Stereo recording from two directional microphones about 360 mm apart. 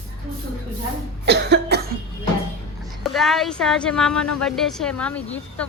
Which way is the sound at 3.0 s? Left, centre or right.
Centre.